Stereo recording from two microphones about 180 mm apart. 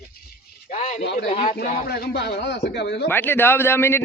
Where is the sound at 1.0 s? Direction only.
70° left (ahead or behind).